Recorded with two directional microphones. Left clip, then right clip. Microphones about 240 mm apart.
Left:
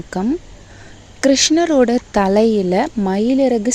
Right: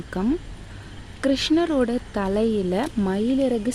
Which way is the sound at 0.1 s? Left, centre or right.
Left.